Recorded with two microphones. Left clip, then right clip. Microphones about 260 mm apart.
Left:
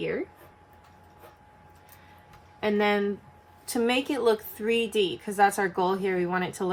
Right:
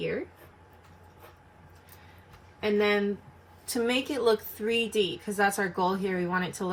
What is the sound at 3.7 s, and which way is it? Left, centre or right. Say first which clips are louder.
Speech: left 2 dB; left.